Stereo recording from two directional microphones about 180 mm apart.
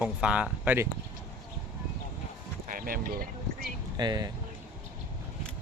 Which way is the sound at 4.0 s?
25° right (ahead or behind).